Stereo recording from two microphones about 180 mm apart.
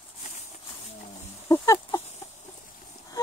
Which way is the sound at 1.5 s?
15° left (ahead or behind).